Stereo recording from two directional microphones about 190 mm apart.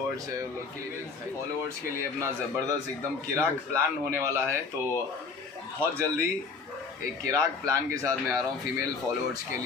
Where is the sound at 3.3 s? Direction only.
15° right (ahead or behind).